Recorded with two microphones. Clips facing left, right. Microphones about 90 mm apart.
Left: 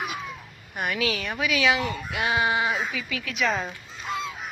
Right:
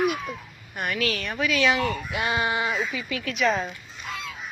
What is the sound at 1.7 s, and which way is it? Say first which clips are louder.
Speech: right 2 dB; 20° left (ahead or behind).